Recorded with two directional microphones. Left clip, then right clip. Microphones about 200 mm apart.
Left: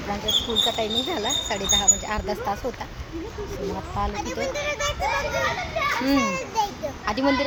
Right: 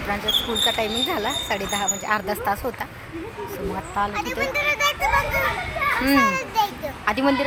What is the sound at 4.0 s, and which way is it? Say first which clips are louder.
Speech: right 4 dB; 5° right (ahead or behind).